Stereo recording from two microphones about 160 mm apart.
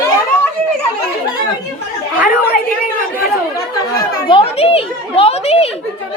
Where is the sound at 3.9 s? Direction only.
30° left (ahead or behind).